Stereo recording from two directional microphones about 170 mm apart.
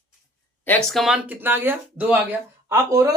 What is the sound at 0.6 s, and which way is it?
Speech, 5° left (ahead or behind).